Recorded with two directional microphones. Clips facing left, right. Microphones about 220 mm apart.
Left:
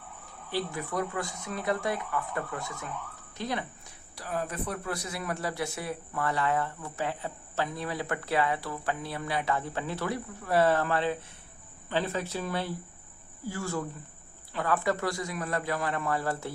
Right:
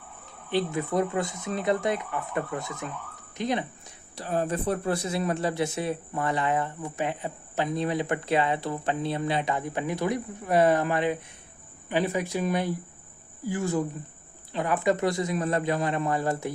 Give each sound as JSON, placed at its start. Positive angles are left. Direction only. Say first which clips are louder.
{"t": 0.5, "sound": "speech", "louder": "right 6 dB", "side_deg": -20}